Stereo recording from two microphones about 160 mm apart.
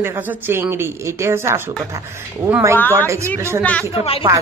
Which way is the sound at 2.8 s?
10° left (ahead or behind).